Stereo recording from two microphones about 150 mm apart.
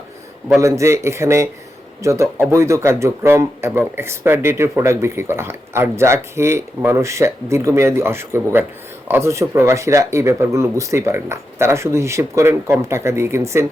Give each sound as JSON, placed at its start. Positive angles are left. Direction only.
{"t": 0.6, "sound": "speech", "side_deg": -20}